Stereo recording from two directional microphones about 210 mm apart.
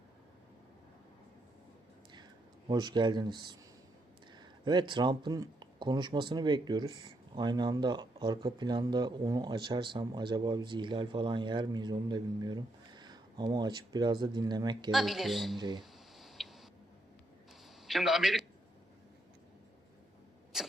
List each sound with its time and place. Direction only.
2.6 s speech: 20° right (ahead or behind)
14.9 s speech: centre (ahead or behind)
15.5 s speech: 20° right (ahead or behind)
15.8 s a sound: centre (ahead or behind)
17.8 s a man's voice: centre (ahead or behind)
20.5 s a sound: centre (ahead or behind)